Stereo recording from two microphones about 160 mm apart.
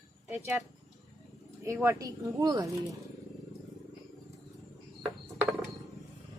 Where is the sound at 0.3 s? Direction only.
15° right (ahead or behind).